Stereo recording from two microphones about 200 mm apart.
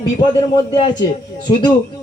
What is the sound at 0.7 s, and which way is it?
Speech, 25° left (ahead or behind).